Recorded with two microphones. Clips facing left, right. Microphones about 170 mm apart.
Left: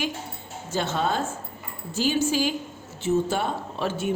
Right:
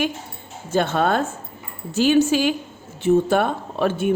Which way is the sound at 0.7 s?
55° right (ahead or behind).